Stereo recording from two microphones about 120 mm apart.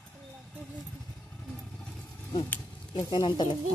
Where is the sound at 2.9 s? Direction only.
40° left (ahead or behind).